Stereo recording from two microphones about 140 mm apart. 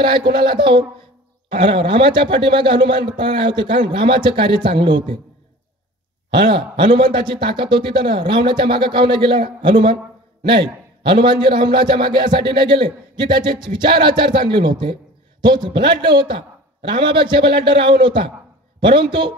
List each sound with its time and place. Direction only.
0.0 s a man's voice: 35° right (ahead or behind)
6.5 s a man's voice: 35° right (ahead or behind)